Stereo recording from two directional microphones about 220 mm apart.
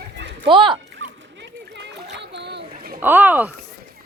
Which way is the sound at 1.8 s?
50° right (ahead or behind).